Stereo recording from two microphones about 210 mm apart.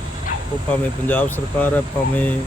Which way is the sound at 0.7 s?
10° left (ahead or behind).